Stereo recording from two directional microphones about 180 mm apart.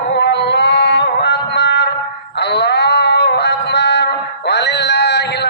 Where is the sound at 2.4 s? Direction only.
70° left (ahead or behind).